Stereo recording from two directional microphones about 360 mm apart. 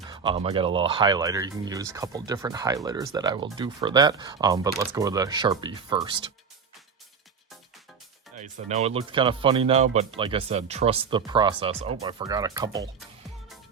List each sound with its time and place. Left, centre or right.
0.1 s speech: centre
8.4 s speech: centre